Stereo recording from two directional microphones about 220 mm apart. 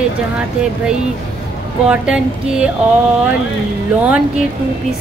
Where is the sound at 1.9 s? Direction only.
5° right (ahead or behind).